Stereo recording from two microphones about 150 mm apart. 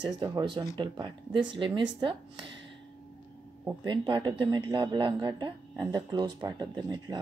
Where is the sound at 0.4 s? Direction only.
30° right (ahead or behind).